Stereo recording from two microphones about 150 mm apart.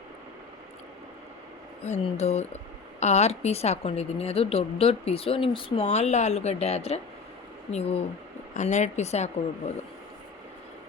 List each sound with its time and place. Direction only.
1.8 s a woman's voice: 45° left (ahead or behind)